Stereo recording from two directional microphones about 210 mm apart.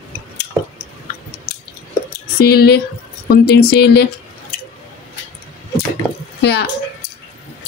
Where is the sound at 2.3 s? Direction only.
50° left (ahead or behind).